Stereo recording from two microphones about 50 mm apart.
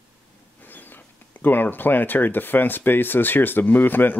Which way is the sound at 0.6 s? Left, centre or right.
Left.